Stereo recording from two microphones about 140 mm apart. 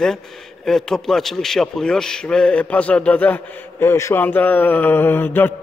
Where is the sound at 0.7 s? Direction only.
Centre (ahead or behind).